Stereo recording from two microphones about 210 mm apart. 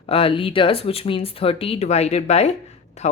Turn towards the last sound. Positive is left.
turn(degrees=30)  # may be behind; listen again after turning